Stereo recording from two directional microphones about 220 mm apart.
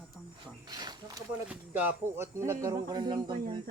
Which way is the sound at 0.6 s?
20° right (ahead or behind).